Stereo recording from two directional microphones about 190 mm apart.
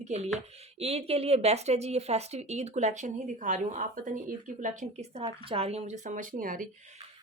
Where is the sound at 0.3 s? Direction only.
30° right (ahead or behind).